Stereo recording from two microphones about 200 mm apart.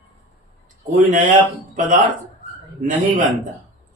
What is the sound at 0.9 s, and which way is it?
Speech, 40° right (ahead or behind).